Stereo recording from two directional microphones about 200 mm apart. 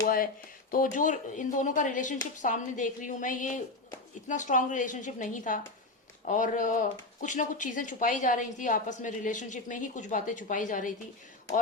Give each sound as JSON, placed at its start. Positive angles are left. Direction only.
{"t": 0.7, "sound": "speech", "side_deg": 40}